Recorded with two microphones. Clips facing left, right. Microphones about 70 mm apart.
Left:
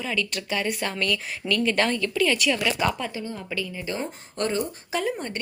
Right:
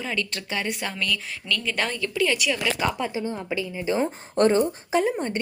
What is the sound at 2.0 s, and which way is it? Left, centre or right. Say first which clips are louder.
A woman's voice: left 1 dB; centre.